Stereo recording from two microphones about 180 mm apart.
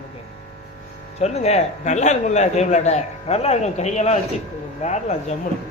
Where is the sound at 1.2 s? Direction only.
35° left (ahead or behind).